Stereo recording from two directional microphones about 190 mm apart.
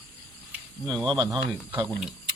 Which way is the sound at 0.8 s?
Centre (ahead or behind).